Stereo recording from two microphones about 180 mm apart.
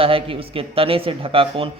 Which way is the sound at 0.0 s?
30° right (ahead or behind).